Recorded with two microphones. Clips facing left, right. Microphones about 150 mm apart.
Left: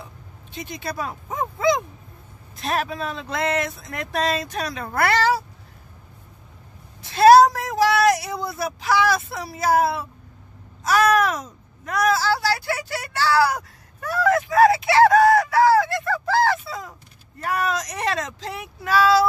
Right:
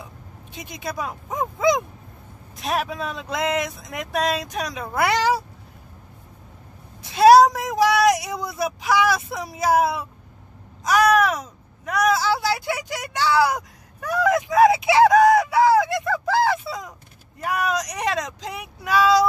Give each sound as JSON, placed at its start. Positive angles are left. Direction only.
{"t": 0.9, "sound": "speech", "side_deg": -10}
{"t": 2.5, "sound": "speech", "side_deg": -10}
{"t": 4.8, "sound": "speech", "side_deg": -5}
{"t": 5.1, "sound": "speech", "side_deg": -15}
{"t": 7.0, "sound": "a sound", "side_deg": -15}
{"t": 8.5, "sound": "speech", "side_deg": -15}
{"t": 11.1, "sound": "a sound", "side_deg": 0}
{"t": 12.1, "sound": "vehicle", "side_deg": -20}
{"t": 17.4, "sound": "speech", "side_deg": -10}